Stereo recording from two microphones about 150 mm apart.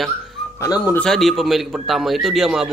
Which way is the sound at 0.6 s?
25° left (ahead or behind).